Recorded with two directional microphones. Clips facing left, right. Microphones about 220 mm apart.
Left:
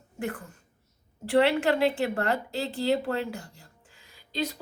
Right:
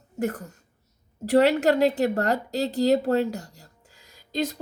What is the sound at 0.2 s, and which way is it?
A woman's voice, 40° right (ahead or behind).